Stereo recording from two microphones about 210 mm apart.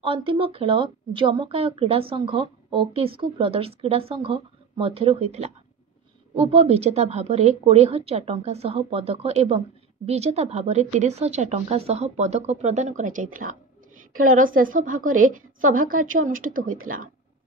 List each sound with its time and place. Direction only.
0.0 s a woman's voice: 25° right (ahead or behind); by 16.7 s 40° right (ahead or behind)
16.7 s speech: 80° right